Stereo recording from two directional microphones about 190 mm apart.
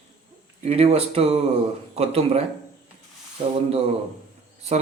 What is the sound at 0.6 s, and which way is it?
Speech, 30° right (ahead or behind).